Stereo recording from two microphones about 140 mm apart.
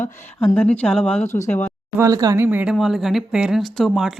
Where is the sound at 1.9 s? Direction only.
25° right (ahead or behind).